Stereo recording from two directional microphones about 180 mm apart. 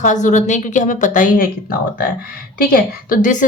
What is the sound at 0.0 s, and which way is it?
Speech, 45° left (ahead or behind).